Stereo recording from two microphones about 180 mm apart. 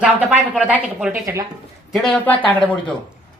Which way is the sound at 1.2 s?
20° right (ahead or behind).